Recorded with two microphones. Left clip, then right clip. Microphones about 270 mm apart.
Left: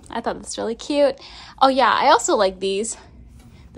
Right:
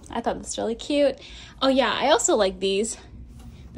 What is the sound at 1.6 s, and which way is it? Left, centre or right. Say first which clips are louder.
A woman's voice: left 6 dB; centre.